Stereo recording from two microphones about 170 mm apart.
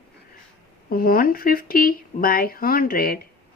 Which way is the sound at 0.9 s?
60° left (ahead or behind).